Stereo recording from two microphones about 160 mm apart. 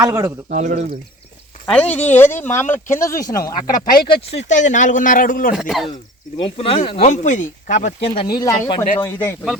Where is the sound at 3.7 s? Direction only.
75° left (ahead or behind).